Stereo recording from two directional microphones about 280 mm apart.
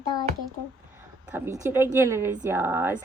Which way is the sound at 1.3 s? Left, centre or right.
Centre.